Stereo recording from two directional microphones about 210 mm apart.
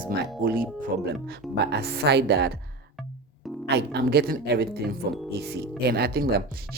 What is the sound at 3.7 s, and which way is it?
Speech, 50° right (ahead or behind).